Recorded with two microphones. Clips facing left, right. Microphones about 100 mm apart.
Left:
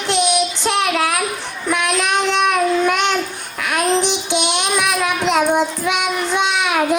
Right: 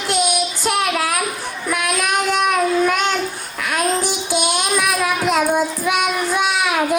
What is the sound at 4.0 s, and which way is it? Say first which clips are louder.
Child singing: left 2 dB; 20° left (ahead or behind).